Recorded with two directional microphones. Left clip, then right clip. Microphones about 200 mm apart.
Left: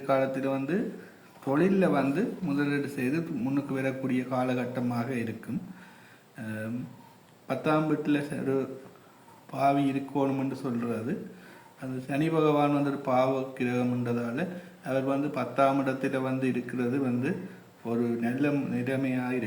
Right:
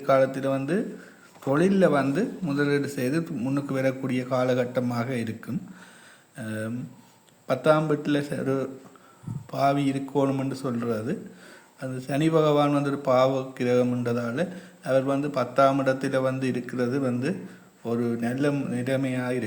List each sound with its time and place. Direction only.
0.0 s a man's voice: 50° right (ahead or behind)
6.3 s a man's voice: 50° right (ahead or behind)